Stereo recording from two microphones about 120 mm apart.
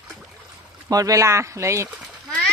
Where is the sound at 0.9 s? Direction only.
30° right (ahead or behind).